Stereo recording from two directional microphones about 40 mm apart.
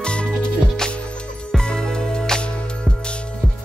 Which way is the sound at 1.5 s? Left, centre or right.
Left.